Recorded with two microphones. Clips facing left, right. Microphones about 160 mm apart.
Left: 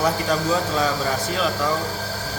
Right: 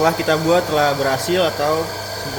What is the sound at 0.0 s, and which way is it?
Speech, 85° right.